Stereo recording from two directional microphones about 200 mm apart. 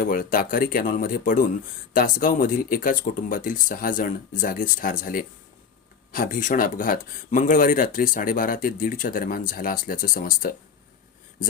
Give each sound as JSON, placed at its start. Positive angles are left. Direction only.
{"t": 0.0, "sound": "speech", "side_deg": 45}